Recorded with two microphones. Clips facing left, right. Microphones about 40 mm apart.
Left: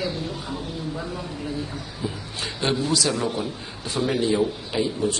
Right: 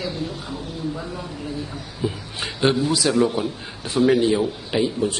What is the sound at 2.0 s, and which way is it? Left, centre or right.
A man's voice, centre.